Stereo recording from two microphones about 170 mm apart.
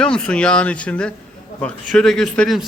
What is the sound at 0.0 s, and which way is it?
A man's voice, 5° left (ahead or behind).